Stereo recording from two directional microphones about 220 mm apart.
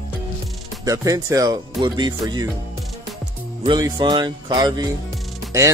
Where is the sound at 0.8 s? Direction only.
15° right (ahead or behind).